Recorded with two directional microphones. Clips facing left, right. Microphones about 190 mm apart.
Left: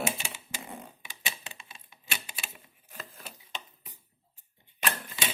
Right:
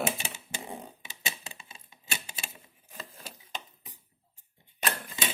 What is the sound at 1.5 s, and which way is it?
Typewriter, 35° right (ahead or behind).